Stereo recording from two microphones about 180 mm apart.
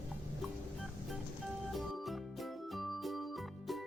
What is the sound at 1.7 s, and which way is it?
Music, centre (ahead or behind).